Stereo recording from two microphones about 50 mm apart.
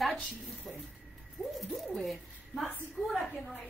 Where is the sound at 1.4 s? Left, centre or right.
Left.